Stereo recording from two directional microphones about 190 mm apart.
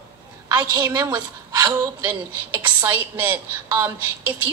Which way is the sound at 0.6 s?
15° right (ahead or behind).